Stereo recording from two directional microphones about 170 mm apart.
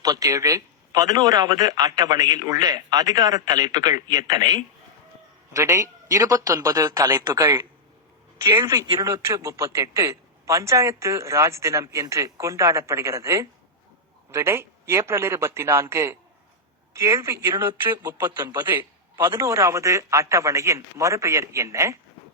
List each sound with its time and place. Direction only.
0.0 s a man's voice: 20° right (ahead or behind)